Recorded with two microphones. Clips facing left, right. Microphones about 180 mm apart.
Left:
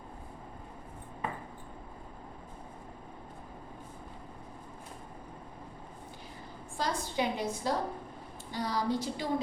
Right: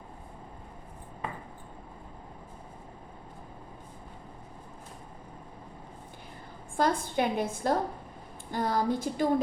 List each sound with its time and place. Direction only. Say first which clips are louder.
6.7 s a woman's voice: right 5 dB; 55° right (ahead or behind)